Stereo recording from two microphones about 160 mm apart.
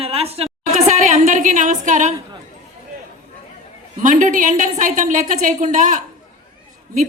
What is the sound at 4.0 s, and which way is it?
A woman's voice, 50° right (ahead or behind).